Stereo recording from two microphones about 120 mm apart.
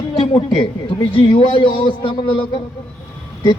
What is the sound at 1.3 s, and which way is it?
Speech, 45° left (ahead or behind).